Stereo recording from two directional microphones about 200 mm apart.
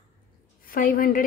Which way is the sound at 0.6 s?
45° left (ahead or behind).